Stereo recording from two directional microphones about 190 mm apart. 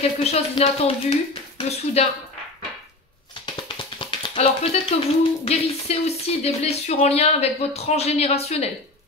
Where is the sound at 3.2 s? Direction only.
25° left (ahead or behind).